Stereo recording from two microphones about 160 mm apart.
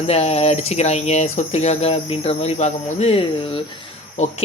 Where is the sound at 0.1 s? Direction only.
40° left (ahead or behind).